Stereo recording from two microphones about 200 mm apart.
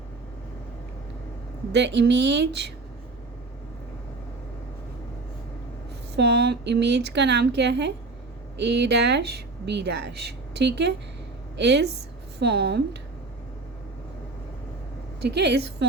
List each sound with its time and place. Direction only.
1.7 s speech: 60° right (ahead or behind)
6.1 s a woman's voice: 55° right (ahead or behind)
15.2 s speech: 55° right (ahead or behind)